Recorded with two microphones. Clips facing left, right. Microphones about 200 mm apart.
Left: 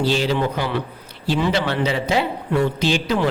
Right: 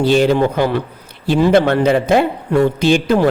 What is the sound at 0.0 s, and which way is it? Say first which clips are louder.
Speech: right 7 dB; 55° right (ahead or behind).